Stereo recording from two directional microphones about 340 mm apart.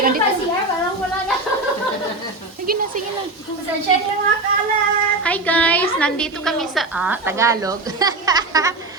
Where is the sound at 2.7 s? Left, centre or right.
Right.